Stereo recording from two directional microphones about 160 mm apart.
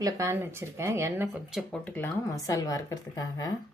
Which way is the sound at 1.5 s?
5° left (ahead or behind).